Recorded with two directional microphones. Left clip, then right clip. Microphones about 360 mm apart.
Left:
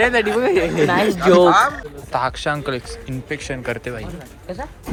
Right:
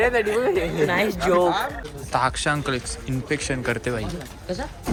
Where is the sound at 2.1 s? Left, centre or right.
Centre.